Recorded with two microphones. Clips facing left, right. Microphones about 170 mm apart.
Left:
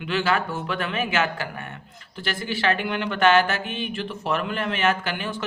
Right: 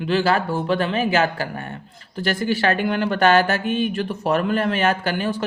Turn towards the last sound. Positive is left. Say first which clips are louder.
# right 6 dB
turn(degrees=-40)  # may be behind; listen again after turning